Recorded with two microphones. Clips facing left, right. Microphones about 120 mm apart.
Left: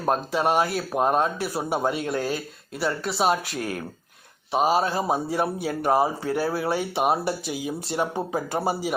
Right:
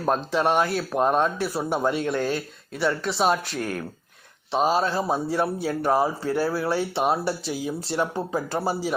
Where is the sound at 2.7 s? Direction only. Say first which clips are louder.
Right 2 dB; 40° left (ahead or behind).